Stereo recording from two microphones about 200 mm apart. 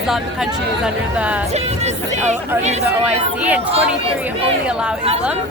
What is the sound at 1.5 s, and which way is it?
Music, 35° right (ahead or behind).